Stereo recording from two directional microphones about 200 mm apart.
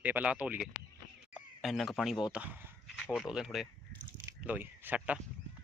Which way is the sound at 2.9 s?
5° left (ahead or behind).